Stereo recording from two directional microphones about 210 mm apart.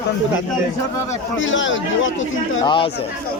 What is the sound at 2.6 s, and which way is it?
Speech, 25° left (ahead or behind).